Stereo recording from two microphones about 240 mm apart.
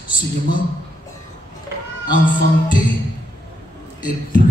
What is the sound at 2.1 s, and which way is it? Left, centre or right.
Speech, left.